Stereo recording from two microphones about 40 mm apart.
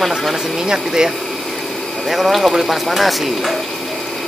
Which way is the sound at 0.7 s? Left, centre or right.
Centre.